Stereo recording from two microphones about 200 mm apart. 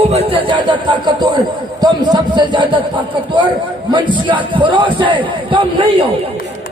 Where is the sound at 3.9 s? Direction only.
25° right (ahead or behind).